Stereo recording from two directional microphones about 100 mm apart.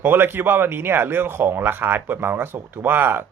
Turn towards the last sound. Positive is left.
turn(degrees=-20)  # may be behind; listen again after turning